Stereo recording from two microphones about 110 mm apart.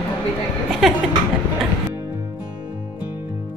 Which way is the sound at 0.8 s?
Centre (ahead or behind).